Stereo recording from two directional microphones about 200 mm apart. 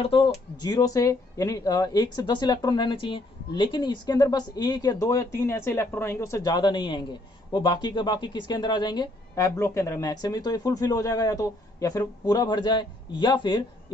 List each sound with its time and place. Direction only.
0.0 s speech: 25° left (ahead or behind)